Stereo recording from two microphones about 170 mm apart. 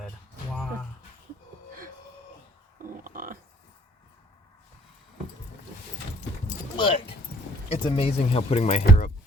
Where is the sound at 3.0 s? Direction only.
55° right (ahead or behind).